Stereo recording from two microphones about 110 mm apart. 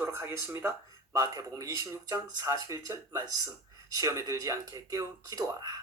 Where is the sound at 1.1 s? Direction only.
30° right (ahead or behind).